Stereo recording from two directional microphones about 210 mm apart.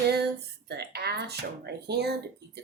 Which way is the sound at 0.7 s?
50° right (ahead or behind).